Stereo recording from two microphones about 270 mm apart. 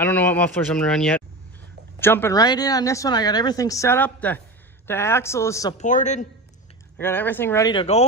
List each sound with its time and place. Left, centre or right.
0.0 s a woman's voice: centre
5.8 s a man's voice: left
7.0 s a woman's voice: centre